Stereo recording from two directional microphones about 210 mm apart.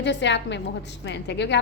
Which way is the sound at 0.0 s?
55° left (ahead or behind).